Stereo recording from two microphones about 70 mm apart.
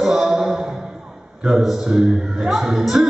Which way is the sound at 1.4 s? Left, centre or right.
Centre.